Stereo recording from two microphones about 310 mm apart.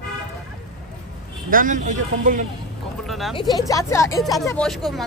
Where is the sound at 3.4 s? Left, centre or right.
Centre.